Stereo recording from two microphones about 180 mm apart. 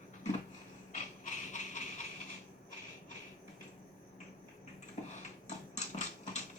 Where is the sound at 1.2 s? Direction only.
45° left (ahead or behind).